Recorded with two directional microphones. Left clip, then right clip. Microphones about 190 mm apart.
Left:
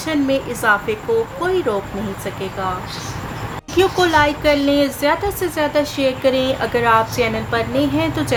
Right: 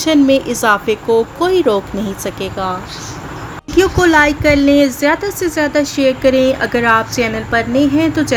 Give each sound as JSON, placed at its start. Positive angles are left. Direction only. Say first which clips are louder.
{"t": 0.0, "sound": "speech", "louder": "right 7 dB", "side_deg": -50}
{"t": 3.8, "sound": "a woman's voice", "louder": "right 4 dB", "side_deg": -25}